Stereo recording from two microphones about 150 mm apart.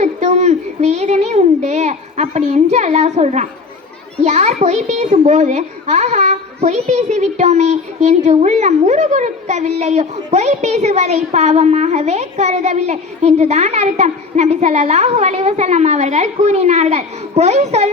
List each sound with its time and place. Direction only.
0.0 s a child's voice: 50° right (ahead or behind)